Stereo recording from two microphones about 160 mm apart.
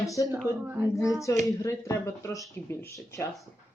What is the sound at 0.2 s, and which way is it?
Speech, 25° left (ahead or behind).